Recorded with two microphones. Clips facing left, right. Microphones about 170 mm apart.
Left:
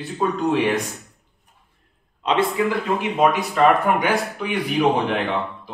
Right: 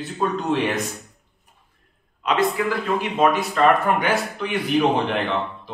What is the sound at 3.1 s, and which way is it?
Speech, 15° left (ahead or behind).